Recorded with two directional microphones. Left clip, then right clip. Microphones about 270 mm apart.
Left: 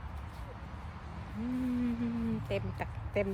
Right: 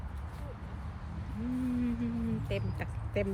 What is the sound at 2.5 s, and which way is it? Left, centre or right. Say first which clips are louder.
Speech: left 1 dB; centre.